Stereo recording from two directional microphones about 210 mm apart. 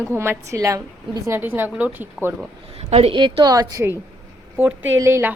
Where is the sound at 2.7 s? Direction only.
30° right (ahead or behind).